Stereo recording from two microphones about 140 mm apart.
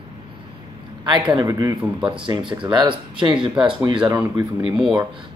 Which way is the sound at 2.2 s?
35° right (ahead or behind).